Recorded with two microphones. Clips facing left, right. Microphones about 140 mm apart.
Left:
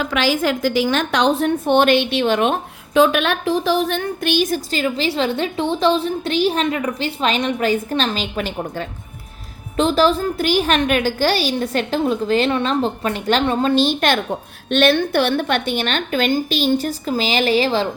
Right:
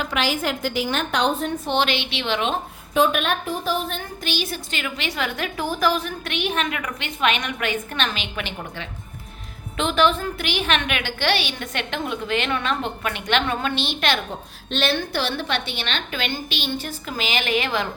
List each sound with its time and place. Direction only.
0.2 s a woman's voice: 90° left; by 2.6 s 50° left (ahead or behind)
2.9 s a woman's voice: 90° left; by 14.2 s 45° left (ahead or behind)
14.3 s a woman's voice: 60° left (ahead or behind); by 17.8 s 30° left (ahead or behind)